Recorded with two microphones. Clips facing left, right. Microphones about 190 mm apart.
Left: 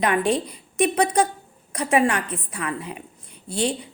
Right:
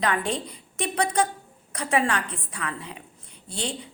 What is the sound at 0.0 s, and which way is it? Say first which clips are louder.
A woman's voice: left 5 dB; 20° left (ahead or behind).